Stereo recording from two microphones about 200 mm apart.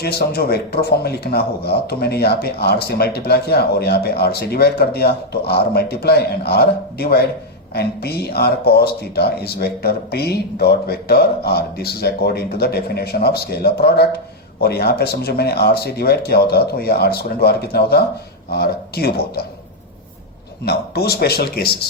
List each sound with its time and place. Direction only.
0.0 s speech: 50° left (ahead or behind)
20.7 s speech: 50° left (ahead or behind)